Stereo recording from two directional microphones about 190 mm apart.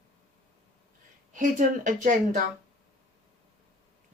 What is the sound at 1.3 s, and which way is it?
A woman's voice, 45° right (ahead or behind).